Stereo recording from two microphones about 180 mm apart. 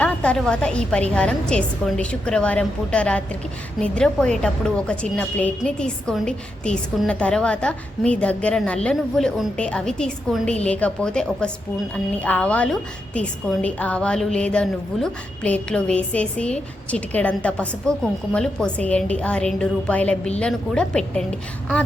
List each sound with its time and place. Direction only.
0.0 s a woman's voice: 5° left (ahead or behind)